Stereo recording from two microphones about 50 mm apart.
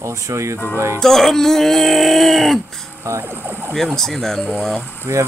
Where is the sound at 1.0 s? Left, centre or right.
Centre.